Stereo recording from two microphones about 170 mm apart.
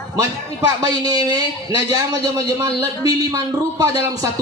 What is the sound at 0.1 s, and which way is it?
A man's voice, 20° right (ahead or behind).